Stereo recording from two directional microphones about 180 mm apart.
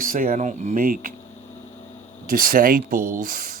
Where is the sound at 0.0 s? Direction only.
50° right (ahead or behind).